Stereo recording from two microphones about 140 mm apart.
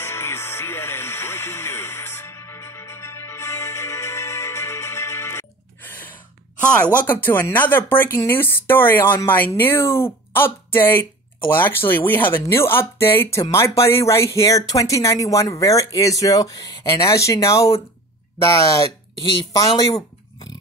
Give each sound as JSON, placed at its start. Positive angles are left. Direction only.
{"t": 0.0, "sound": "music", "side_deg": 15}
{"t": 5.9, "sound": "gasp", "side_deg": 15}
{"t": 6.6, "sound": "speech", "side_deg": 10}